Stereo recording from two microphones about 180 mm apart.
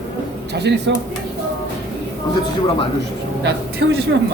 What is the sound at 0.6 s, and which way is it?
Speech, 70° right (ahead or behind).